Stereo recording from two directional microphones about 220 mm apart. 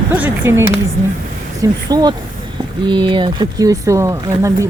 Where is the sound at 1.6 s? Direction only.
20° right (ahead or behind).